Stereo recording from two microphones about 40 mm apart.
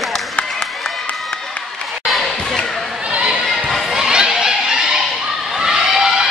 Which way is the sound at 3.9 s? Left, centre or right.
Centre.